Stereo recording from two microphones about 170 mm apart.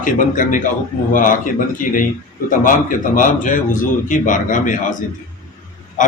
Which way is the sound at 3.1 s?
50° left (ahead or behind).